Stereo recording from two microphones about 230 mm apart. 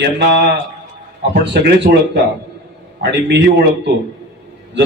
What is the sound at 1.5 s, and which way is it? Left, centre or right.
A man's voice, right.